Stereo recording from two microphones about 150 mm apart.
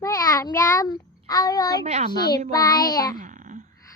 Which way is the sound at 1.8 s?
45° right (ahead or behind).